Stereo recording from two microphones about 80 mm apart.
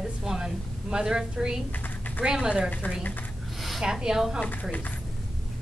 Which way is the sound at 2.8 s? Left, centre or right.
Centre.